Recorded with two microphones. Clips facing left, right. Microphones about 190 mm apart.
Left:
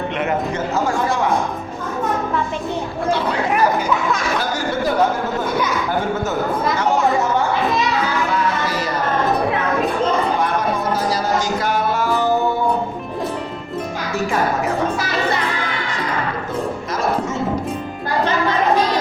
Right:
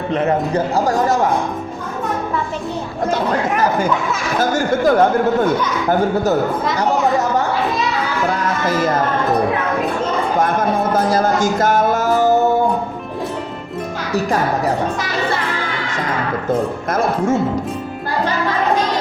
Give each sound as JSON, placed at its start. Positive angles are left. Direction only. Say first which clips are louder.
{"t": 0.1, "sound": "speech", "louder": "right 9 dB", "side_deg": -35}
{"t": 4.4, "sound": "speech", "louder": "right 5 dB", "side_deg": -50}
{"t": 6.7, "sound": "speech", "louder": "right 2 dB", "side_deg": -40}
{"t": 8.3, "sound": "music", "louder": "right 2 dB", "side_deg": -50}
{"t": 10.4, "sound": "music", "louder": "right 3 dB", "side_deg": -50}
{"t": 14.1, "sound": "speech", "louder": "right 2 dB", "side_deg": -35}